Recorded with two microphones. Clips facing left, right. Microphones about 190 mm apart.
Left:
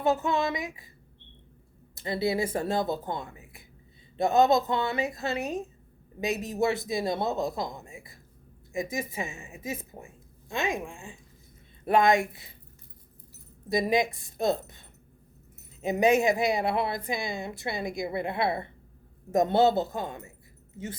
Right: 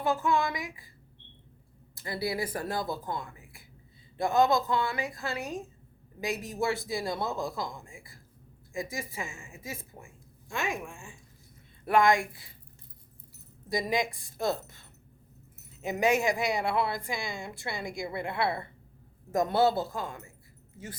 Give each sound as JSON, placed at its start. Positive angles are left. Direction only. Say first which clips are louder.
{"t": 0.0, "sound": "speech", "louder": "left 2 dB", "side_deg": 20}
{"t": 2.0, "sound": "a woman's voice", "louder": "left 5 dB", "side_deg": 25}
{"t": 13.7, "sound": "speech", "louder": "left 4 dB", "side_deg": 25}